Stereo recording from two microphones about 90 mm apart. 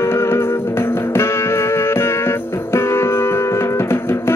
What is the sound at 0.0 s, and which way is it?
Music, 30° left (ahead or behind).